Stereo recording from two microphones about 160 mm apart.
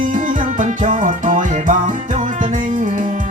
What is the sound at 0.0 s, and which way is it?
Music, 55° right (ahead or behind).